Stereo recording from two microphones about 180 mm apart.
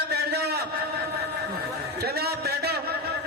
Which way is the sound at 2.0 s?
60° right (ahead or behind).